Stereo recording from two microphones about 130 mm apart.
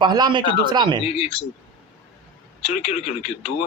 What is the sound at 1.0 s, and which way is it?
Speech, 50° left (ahead or behind).